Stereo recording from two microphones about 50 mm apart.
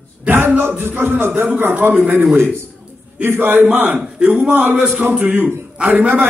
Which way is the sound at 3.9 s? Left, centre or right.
Right.